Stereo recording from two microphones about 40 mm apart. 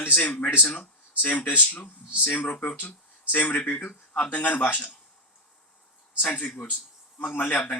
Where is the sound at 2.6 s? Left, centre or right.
Left.